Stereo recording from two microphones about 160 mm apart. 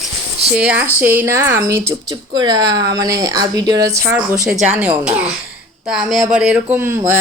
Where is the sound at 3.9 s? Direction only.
10° right (ahead or behind).